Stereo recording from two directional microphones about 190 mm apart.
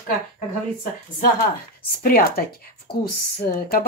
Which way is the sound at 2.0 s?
50° left (ahead or behind).